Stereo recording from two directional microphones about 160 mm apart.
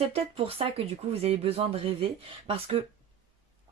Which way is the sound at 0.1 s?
35° right (ahead or behind).